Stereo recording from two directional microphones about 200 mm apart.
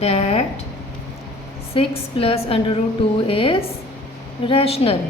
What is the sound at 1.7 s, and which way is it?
A woman's voice, 30° left (ahead or behind).